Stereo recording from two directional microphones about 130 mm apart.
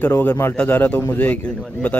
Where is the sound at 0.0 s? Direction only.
15° left (ahead or behind).